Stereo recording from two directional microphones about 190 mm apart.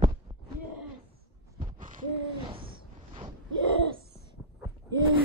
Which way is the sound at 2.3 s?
25° right (ahead or behind).